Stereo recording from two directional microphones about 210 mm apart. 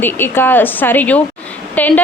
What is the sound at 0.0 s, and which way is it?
Speech, 10° left (ahead or behind).